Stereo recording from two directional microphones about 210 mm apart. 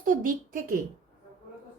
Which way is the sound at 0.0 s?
40° right (ahead or behind).